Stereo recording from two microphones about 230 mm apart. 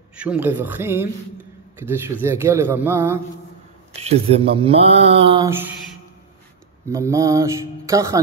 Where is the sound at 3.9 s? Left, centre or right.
Right.